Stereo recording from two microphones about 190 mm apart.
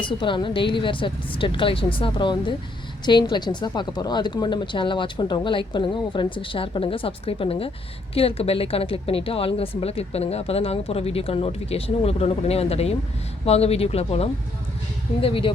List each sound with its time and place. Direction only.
0.0 s a woman's voice: 25° left (ahead or behind)